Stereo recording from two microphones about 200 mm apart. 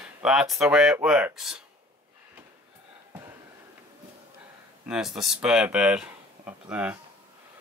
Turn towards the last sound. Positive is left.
turn(degrees=-5)  # may be behind; listen again after turning